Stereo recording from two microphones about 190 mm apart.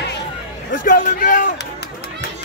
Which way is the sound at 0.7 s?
45° left (ahead or behind).